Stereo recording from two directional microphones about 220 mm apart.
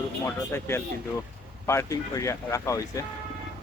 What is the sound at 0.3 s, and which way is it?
Speech, 10° left (ahead or behind).